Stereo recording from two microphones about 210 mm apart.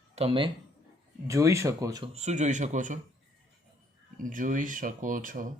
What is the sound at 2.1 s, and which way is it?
Speech, 35° right (ahead or behind).